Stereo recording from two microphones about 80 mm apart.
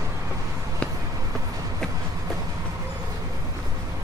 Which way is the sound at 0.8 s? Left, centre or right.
Centre.